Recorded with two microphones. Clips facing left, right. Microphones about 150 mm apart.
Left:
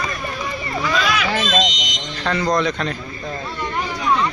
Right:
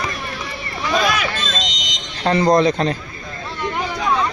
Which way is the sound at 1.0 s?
45° right (ahead or behind).